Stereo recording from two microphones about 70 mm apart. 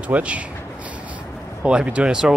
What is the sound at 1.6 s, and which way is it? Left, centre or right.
Speech, centre.